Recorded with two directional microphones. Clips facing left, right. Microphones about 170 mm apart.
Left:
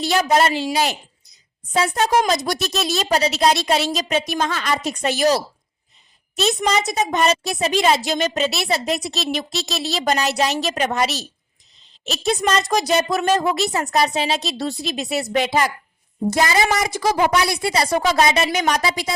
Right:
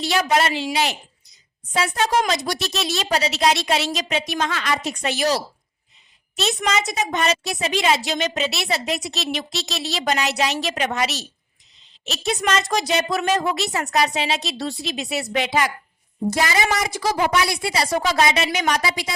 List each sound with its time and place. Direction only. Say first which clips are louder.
0.0 s a woman's voice: left 3 dB; 40° left (ahead or behind)
6.6 s a woman's voice: left 3 dB; 35° left (ahead or behind)